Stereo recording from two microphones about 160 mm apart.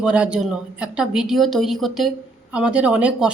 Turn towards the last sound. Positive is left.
turn(degrees=-5)  # may be behind; listen again after turning